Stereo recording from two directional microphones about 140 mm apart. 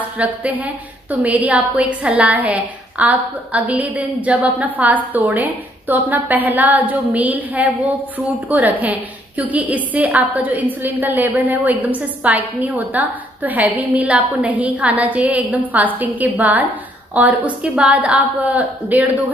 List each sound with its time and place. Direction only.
0.2 s a woman's voice: 10° right (ahead or behind)